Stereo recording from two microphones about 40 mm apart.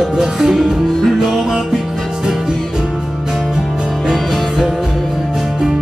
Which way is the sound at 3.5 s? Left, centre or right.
Centre.